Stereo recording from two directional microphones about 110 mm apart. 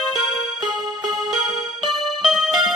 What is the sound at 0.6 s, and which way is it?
Music, 40° right (ahead or behind).